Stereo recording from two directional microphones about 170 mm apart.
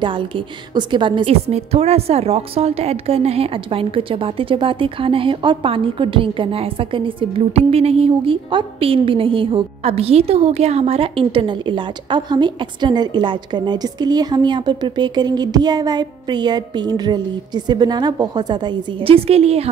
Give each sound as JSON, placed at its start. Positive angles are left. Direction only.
{"t": 0.0, "sound": "a woman's voice", "side_deg": -30}